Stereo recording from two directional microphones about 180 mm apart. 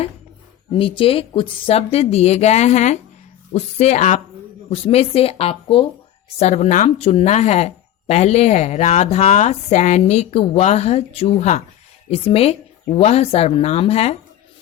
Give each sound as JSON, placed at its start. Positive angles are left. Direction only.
{"t": 0.7, "sound": "speech", "side_deg": 30}